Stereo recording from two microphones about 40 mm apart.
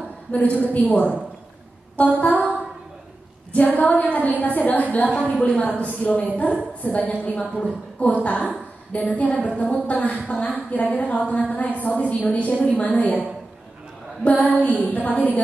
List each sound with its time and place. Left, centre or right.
0.3 s a woman's voice: left
3.5 s a woman's voice: left
14.2 s a woman's voice: left